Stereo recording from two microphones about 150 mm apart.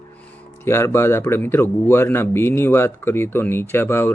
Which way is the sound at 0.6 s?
15° left (ahead or behind).